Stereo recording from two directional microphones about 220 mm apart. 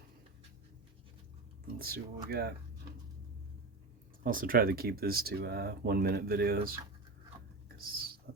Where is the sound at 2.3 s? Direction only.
45° right (ahead or behind).